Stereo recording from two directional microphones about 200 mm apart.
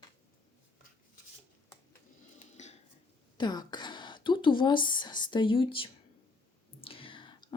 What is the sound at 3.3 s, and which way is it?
A woman's voice, 20° left (ahead or behind).